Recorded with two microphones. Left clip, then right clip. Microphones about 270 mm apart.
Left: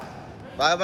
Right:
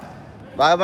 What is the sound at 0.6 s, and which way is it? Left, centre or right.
Speech, right.